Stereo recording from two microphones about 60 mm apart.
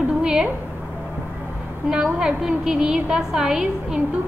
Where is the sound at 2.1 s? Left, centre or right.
Centre.